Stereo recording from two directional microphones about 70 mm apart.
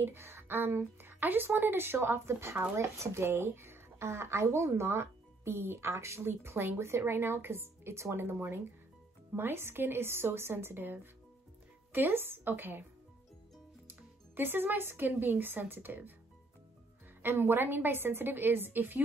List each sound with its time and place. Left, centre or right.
0.0 s a woman's voice: right
13.8 s speech: right
17.2 s speech: right